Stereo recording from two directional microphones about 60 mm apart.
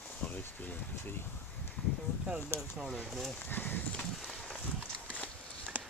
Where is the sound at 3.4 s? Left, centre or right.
Left.